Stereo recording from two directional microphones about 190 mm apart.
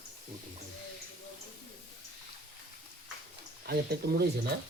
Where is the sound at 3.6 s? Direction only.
55° right (ahead or behind).